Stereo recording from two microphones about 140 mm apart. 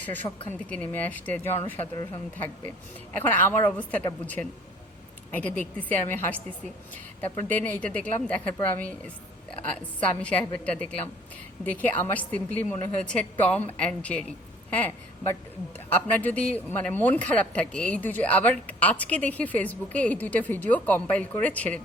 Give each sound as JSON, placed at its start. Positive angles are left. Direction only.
{"t": 0.2, "sound": "a woman's voice", "side_deg": 25}
{"t": 0.7, "sound": "a man's voice", "side_deg": 10}
{"t": 7.4, "sound": "a man's voice", "side_deg": 10}
{"t": 9.6, "sound": "a man's voice", "side_deg": 10}